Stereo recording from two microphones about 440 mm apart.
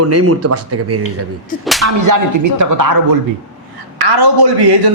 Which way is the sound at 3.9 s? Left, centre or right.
Right.